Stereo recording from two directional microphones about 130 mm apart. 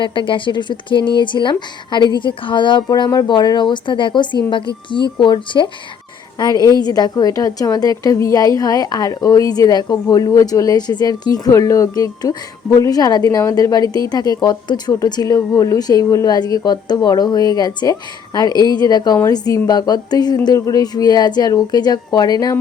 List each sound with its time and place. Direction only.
0.0 s a woman's voice: 40° left (ahead or behind)